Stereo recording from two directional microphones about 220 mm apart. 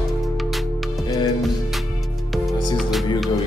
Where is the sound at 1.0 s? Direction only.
15° left (ahead or behind).